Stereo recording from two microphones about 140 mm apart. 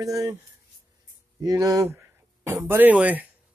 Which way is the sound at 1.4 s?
25° right (ahead or behind).